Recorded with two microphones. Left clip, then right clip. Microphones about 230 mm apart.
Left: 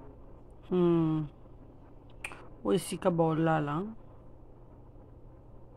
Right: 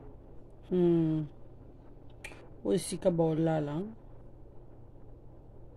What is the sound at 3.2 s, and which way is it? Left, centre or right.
Speech, centre.